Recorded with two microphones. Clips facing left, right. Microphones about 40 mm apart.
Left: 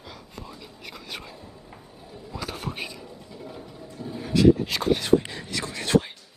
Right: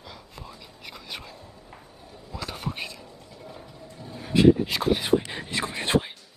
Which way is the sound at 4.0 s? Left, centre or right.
Centre.